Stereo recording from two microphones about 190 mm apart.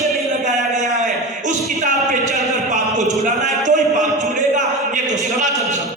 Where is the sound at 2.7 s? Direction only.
40° right (ahead or behind).